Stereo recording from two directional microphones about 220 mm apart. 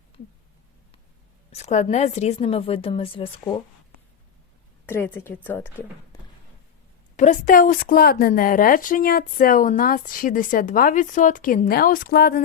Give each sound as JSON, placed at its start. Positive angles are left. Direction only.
{"t": 1.5, "sound": "a woman's voice", "side_deg": 30}
{"t": 4.9, "sound": "speech", "side_deg": 10}
{"t": 7.2, "sound": "a woman's voice", "side_deg": 35}